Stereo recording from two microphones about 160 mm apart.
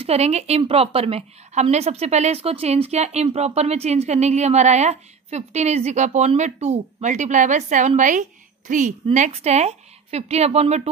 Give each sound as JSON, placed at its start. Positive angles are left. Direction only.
{"t": 0.0, "sound": "a woman's voice", "side_deg": -40}